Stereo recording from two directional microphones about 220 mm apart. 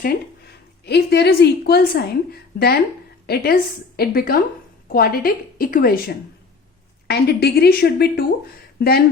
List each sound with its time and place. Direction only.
0.9 s a woman's voice: 50° left (ahead or behind)